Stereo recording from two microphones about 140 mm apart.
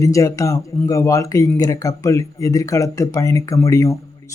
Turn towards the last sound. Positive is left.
turn(degrees=20)  # may be behind; listen again after turning